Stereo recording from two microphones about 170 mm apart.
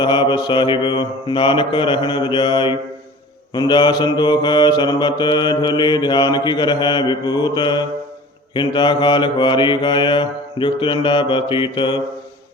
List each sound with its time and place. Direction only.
0.0 s mantra: 25° left (ahead or behind)